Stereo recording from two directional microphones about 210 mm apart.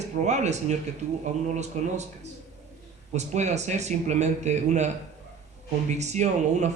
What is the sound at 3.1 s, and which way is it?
A man's voice, 35° right (ahead or behind).